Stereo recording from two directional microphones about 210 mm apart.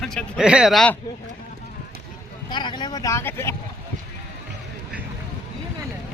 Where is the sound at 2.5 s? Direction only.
20° left (ahead or behind).